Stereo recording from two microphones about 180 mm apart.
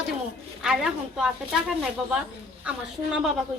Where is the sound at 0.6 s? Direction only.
Centre (ahead or behind).